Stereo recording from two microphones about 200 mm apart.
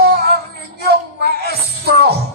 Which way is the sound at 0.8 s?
50° right (ahead or behind).